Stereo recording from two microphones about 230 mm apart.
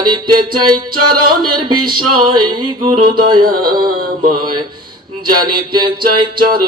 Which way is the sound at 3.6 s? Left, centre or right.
Right.